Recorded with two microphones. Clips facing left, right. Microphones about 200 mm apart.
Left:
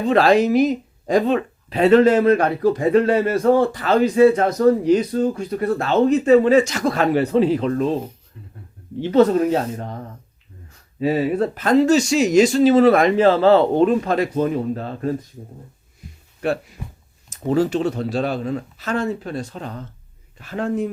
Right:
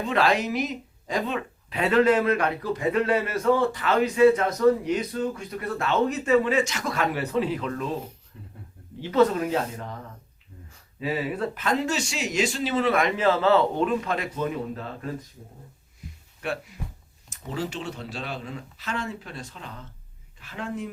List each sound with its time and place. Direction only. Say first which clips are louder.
0.0 s speech: left 8 dB; 35° left (ahead or behind)
9.1 s speech: left 6 dB; 40° left (ahead or behind)
11.0 s speech: left 9 dB; 40° left (ahead or behind)
16.4 s speech: left 8 dB; 35° left (ahead or behind)